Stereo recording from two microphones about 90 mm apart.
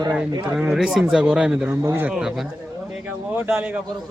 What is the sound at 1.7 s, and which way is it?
Speech, 30° right (ahead or behind).